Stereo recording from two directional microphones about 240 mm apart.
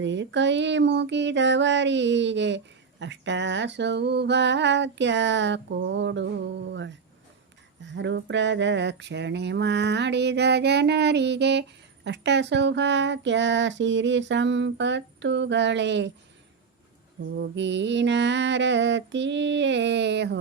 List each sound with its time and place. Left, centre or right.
0.0 s speech: right
17.3 s speech: right